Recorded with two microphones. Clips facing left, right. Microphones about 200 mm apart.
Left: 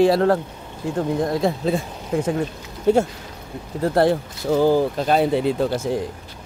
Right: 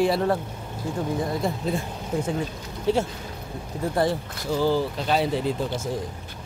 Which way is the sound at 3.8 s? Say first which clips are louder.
Left 6 dB; 65° left (ahead or behind).